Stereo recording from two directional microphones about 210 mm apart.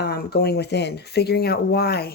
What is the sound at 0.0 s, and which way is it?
Speech, 50° left (ahead or behind).